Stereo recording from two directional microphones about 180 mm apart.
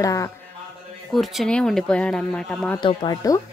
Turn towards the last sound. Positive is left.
turn(degrees=25)  # may be behind; listen again after turning